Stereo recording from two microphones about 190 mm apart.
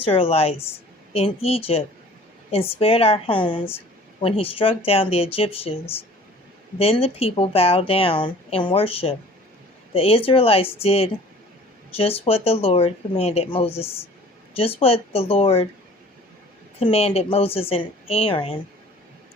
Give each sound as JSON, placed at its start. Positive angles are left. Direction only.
{"t": 0.1, "sound": "speech", "side_deg": 30}
{"t": 16.8, "sound": "speech", "side_deg": 30}